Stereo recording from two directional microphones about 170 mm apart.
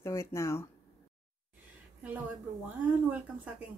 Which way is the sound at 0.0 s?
15° left (ahead or behind).